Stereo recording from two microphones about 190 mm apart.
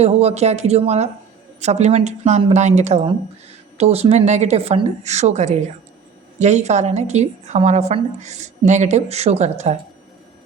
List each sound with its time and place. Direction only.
0.0 s a woman's voice: 35° right (ahead or behind)